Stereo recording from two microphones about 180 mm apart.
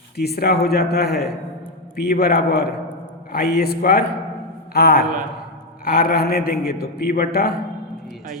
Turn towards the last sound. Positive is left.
turn(degrees=60)  # may be behind; listen again after turning